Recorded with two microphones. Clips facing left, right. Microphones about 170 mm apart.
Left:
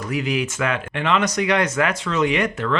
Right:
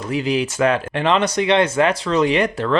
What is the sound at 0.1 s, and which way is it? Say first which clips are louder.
Speech: right 4 dB; 30° right (ahead or behind).